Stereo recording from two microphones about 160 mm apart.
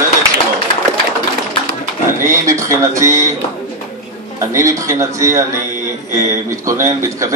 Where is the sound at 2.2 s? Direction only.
20° right (ahead or behind).